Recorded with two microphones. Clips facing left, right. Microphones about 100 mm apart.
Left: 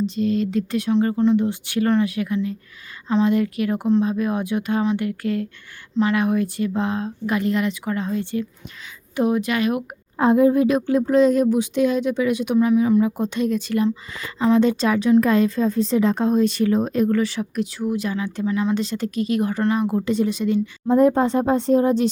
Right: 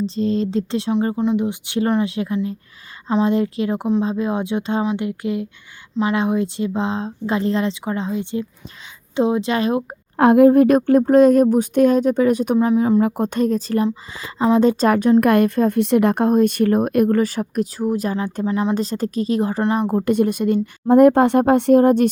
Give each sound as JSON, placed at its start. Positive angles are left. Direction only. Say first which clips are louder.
{"t": 0.0, "sound": "speech", "louder": "right 1 dB", "side_deg": -30}
{"t": 1.1, "sound": "speech", "louder": "left 1 dB", "side_deg": -15}
{"t": 10.2, "sound": "a woman's voice", "louder": "right 5 dB", "side_deg": -65}
{"t": 12.5, "sound": "speech", "louder": "right 1 dB", "side_deg": -30}
{"t": 13.0, "sound": "a woman's voice", "louder": "right 2 dB", "side_deg": -55}
{"t": 15.2, "sound": "a woman's voice", "louder": "right 3 dB", "side_deg": -60}
{"t": 19.9, "sound": "speech", "louder": "right 3 dB", "side_deg": -50}